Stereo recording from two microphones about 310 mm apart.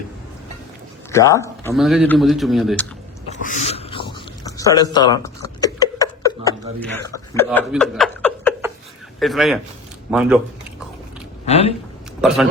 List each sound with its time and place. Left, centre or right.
1.1 s a man's voice: centre
3.4 s a sound: centre
9.2 s a man's voice: centre
11.4 s speech: centre